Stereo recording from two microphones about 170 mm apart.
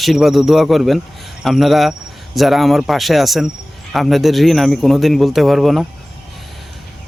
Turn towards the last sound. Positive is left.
turn(degrees=0)  # may be behind; listen again after turning